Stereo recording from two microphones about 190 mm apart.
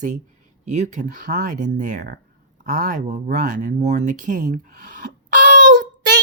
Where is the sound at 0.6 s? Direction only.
40° right (ahead or behind).